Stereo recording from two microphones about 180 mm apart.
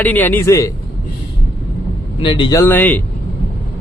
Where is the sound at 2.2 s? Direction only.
25° left (ahead or behind).